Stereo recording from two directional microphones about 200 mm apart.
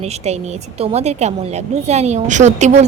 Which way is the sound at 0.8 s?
30° right (ahead or behind).